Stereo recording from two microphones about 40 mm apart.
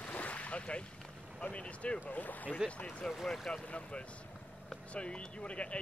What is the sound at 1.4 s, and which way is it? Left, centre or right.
Speech, left.